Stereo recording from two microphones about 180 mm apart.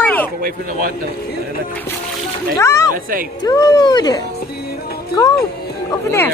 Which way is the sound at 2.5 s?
15° left (ahead or behind).